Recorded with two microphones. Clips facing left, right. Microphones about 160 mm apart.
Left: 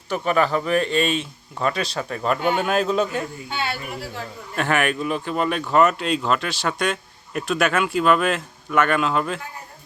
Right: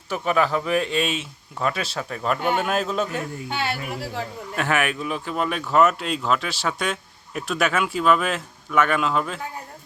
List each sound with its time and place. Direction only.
0.1 s speech: centre (ahead or behind)
4.5 s speech: 5° right (ahead or behind)